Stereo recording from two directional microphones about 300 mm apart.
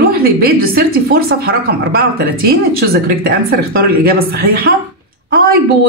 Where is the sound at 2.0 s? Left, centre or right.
Right.